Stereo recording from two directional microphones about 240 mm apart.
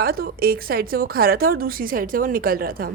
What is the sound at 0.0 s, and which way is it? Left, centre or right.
A woman's voice, right.